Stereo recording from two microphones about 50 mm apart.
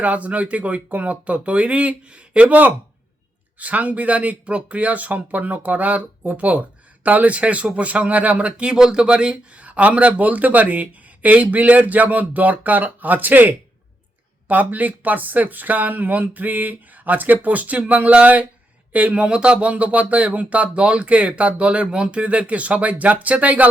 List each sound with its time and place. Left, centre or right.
0.0 s speech: right